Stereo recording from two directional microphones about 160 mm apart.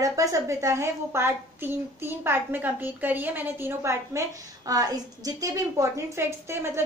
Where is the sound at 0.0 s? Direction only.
20° right (ahead or behind).